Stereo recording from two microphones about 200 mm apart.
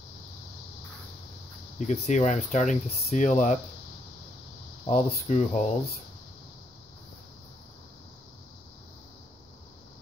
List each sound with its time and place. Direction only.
1.8 s speech: 35° left (ahead or behind)
4.8 s speech: 35° left (ahead or behind)